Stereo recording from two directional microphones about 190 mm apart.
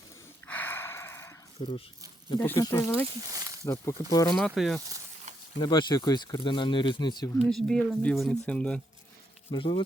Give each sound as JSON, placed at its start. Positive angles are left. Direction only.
{"t": 0.4, "sound": "a sound", "side_deg": 10}
{"t": 2.3, "sound": "speech", "side_deg": 15}
{"t": 4.4, "sound": "speech", "side_deg": 0}
{"t": 5.5, "sound": "speech", "side_deg": 25}
{"t": 7.3, "sound": "speech", "side_deg": 5}
{"t": 9.5, "sound": "speech", "side_deg": 25}